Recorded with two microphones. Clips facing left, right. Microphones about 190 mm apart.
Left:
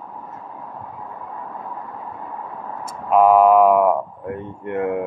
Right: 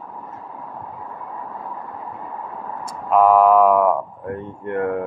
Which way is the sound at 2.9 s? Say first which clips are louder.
Left 1 dB; 20° left (ahead or behind).